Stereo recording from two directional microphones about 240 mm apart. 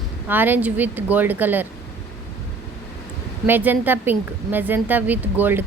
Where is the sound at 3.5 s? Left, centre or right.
Centre.